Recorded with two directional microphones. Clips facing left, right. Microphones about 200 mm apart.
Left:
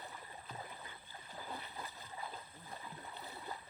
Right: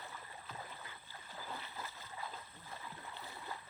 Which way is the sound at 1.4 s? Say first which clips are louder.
Left 1 dB; 15° left (ahead or behind).